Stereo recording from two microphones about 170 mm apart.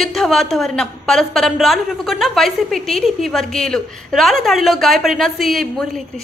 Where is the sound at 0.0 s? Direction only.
Centre (ahead or behind).